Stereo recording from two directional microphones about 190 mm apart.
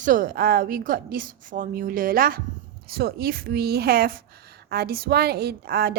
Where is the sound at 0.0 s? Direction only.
45° right (ahead or behind).